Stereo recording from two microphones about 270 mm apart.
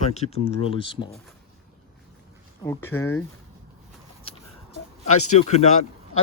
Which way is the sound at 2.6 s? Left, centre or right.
Centre.